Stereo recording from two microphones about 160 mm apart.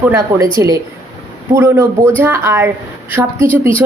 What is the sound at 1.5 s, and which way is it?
A woman's voice, 15° right (ahead or behind).